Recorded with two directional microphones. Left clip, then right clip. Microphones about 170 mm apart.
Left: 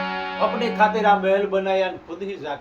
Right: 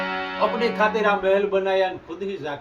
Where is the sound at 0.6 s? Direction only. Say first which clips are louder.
Left 3 dB; centre (ahead or behind).